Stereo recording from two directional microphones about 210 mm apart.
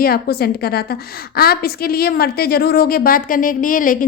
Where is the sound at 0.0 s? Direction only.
45° left (ahead or behind).